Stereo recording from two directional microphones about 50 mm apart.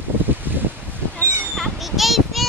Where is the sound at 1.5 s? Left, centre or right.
Centre.